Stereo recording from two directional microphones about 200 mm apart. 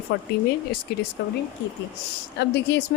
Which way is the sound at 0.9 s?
50° left (ahead or behind).